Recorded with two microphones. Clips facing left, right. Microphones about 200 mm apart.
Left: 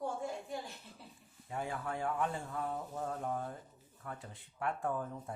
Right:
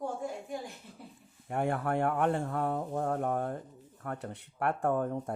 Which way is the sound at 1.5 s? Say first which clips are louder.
Right 9 dB; 65° right (ahead or behind).